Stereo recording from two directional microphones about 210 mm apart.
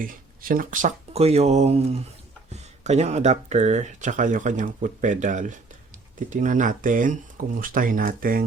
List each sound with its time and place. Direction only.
0.0 s speech: 40° right (ahead or behind)